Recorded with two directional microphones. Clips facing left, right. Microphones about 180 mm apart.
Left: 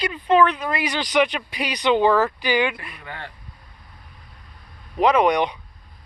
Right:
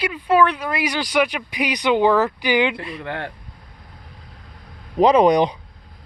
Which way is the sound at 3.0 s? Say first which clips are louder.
Right 7 dB; 65° right (ahead or behind).